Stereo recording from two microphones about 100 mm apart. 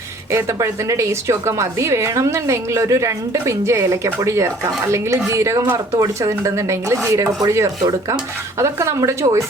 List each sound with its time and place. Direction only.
0.3 s a woman's voice: 30° right (ahead or behind)